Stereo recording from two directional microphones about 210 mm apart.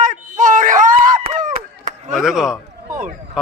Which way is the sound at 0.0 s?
35° right (ahead or behind).